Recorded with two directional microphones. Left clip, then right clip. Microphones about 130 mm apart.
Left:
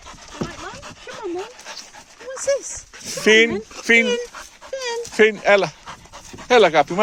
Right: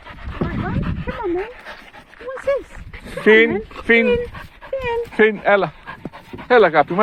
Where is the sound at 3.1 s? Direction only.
30° right (ahead or behind).